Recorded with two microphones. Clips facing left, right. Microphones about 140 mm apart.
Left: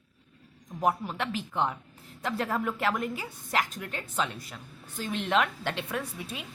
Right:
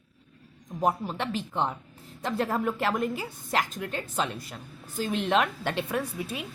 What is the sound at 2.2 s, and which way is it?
A woman's voice, 30° right (ahead or behind).